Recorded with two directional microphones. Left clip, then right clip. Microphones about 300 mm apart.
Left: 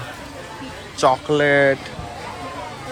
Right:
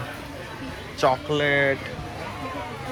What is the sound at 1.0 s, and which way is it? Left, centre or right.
Speech, centre.